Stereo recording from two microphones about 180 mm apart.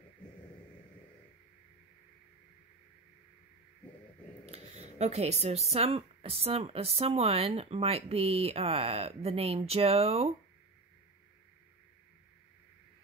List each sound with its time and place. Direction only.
4.5 s speech: 35° right (ahead or behind)